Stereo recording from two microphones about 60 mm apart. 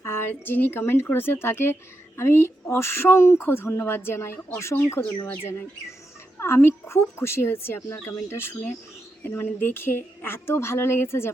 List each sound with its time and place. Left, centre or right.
0.0 s a woman's voice: left
7.8 s a woman's voice: left